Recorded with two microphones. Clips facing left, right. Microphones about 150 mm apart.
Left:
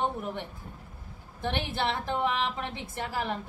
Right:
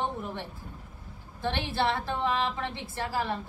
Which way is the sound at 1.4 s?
15° left (ahead or behind).